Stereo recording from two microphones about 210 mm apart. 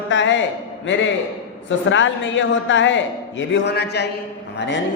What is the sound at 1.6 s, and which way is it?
A man's voice, 65° left (ahead or behind).